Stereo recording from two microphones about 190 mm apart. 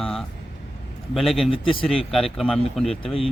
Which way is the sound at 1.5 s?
30° left (ahead or behind).